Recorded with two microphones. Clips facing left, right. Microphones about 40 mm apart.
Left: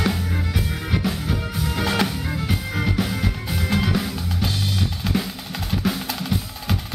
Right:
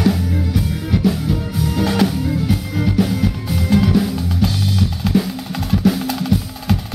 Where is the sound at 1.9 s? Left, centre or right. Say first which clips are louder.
Right 4 dB; centre.